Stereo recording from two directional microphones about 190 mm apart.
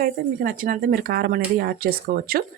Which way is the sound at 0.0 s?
45° right (ahead or behind).